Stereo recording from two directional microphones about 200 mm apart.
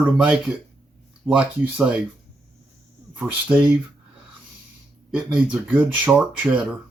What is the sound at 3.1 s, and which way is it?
Speech, 5° right (ahead or behind).